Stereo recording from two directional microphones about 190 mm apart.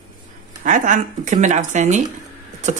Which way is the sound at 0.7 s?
45° right (ahead or behind).